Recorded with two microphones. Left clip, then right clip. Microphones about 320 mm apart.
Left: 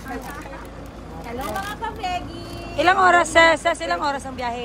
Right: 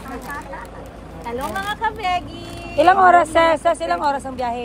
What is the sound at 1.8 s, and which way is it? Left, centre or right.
Speech, centre.